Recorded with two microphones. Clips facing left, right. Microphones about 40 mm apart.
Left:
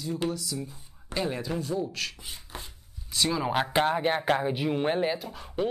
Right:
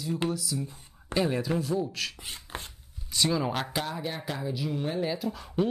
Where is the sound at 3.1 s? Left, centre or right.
Centre.